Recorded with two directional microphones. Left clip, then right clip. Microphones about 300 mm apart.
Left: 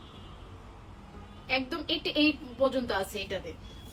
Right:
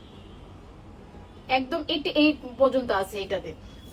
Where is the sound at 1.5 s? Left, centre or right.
Centre.